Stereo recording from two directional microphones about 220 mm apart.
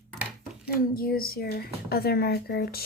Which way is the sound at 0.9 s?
40° left (ahead or behind).